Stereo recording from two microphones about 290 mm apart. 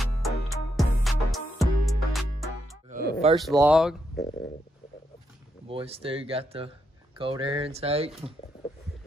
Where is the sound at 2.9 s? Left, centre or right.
Right.